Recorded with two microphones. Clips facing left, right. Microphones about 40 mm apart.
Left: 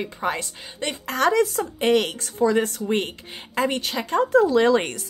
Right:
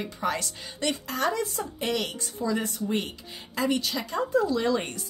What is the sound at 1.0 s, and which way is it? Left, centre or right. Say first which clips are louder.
Speech: left 12 dB; left.